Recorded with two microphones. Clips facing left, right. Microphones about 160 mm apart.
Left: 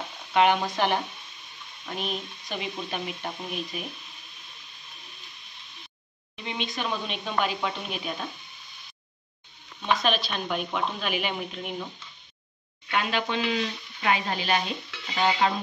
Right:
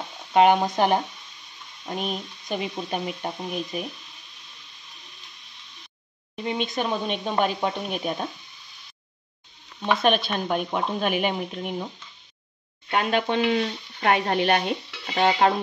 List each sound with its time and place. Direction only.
0.3 s speech: 40° right (ahead or behind)
6.3 s speech: 45° right (ahead or behind)
10.0 s speech: 55° right (ahead or behind)
12.9 s speech: 45° right (ahead or behind)
14.1 s speech: 60° right (ahead or behind)